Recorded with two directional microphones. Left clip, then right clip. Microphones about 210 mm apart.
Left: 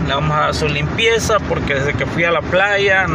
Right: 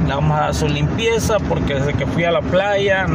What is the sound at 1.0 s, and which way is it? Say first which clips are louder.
Speech: left 3 dB; 20° right (ahead or behind).